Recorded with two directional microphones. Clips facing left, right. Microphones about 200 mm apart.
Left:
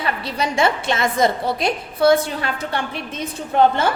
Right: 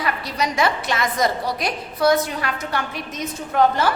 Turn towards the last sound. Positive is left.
turn(degrees=25)  # may be behind; listen again after turning